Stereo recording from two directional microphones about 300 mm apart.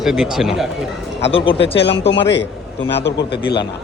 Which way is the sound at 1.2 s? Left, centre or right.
Centre.